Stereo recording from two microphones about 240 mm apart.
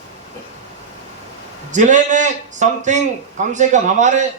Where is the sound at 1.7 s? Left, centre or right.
Right.